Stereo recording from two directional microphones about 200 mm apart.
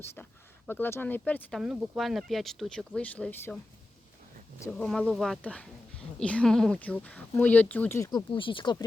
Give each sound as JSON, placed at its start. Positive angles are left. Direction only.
{"t": 0.0, "sound": "speech", "side_deg": 10}
{"t": 4.8, "sound": "speech", "side_deg": 0}
{"t": 8.3, "sound": "speech", "side_deg": 25}